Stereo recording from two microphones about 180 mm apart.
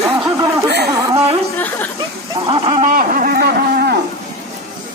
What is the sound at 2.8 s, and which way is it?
Speech, 50° right (ahead or behind).